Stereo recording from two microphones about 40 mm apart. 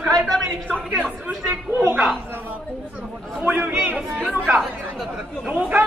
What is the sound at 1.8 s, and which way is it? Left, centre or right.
Speech, right.